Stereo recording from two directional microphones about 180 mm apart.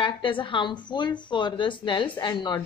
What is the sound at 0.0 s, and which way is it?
A woman's voice, 25° left (ahead or behind).